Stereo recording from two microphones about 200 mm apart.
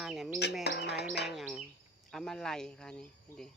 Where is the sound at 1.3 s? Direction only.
Centre (ahead or behind).